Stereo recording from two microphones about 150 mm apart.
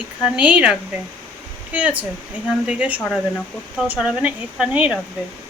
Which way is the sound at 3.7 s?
5° right (ahead or behind).